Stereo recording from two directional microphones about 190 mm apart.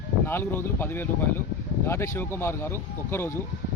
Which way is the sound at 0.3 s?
10° left (ahead or behind).